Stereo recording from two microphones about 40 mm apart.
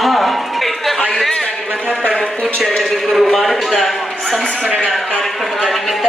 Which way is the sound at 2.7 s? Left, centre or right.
Centre.